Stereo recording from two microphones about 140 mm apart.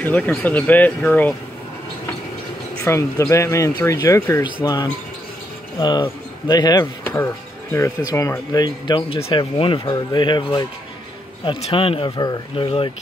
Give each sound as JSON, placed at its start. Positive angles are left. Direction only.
{"t": 0.0, "sound": "speech", "side_deg": 15}
{"t": 2.8, "sound": "speech", "side_deg": 20}